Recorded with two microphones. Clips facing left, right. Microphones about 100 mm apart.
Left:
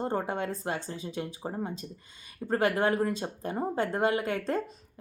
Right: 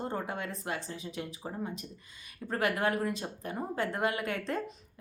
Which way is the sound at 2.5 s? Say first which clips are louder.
Left 4 dB; 30° left (ahead or behind).